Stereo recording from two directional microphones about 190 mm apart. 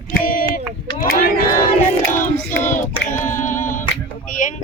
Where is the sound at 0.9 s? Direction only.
50° left (ahead or behind).